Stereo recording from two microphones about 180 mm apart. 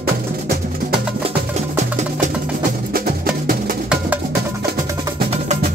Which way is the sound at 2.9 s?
55° right (ahead or behind).